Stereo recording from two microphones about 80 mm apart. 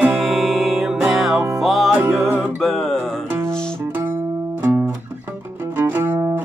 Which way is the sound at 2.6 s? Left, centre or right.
Centre.